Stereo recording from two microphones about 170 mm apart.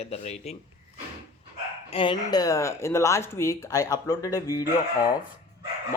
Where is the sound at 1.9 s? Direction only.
30° left (ahead or behind).